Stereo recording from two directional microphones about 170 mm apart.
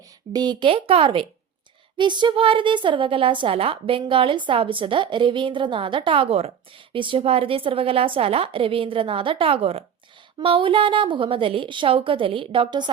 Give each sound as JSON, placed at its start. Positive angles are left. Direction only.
{"t": 0.3, "sound": "a woman's voice", "side_deg": -25}